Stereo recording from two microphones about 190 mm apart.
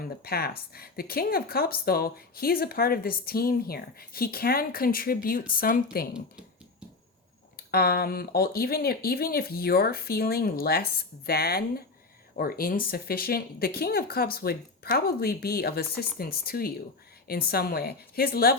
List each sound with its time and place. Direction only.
0.0 s a woman's voice: 55° left (ahead or behind)
7.7 s a woman's voice: 55° left (ahead or behind)